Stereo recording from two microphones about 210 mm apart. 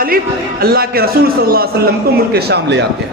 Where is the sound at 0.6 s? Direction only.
45° right (ahead or behind).